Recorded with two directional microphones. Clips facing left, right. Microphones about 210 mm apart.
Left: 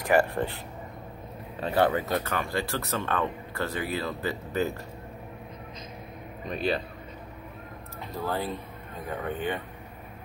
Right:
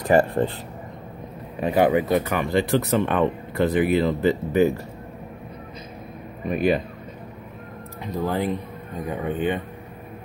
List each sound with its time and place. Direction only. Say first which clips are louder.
0.0 s speech: right 5 dB; 20° right (ahead or behind)
1.6 s speech: right 6 dB; 15° right (ahead or behind)
6.4 s speech: right 7 dB; 10° right (ahead or behind)
8.0 s speech: right 6 dB; 15° right (ahead or behind)